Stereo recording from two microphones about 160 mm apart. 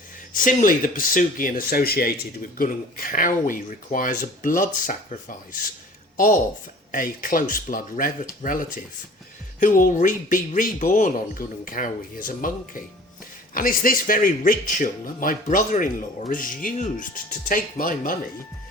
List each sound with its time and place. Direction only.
0.3 s speech: 55° left (ahead or behind)
2.6 s speech: 60° left (ahead or behind)
6.1 s speech: 60° left (ahead or behind)